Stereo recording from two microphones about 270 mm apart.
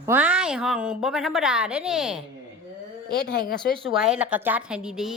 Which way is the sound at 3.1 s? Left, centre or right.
Left.